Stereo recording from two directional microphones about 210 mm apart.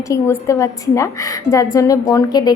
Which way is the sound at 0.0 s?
15° left (ahead or behind).